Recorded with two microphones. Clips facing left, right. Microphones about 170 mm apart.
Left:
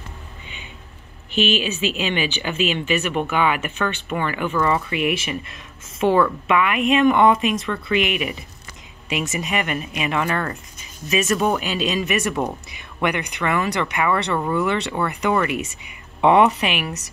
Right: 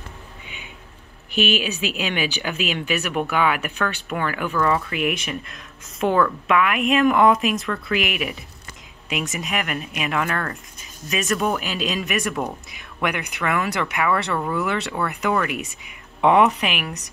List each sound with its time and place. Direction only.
1.3 s speech: 10° right (ahead or behind)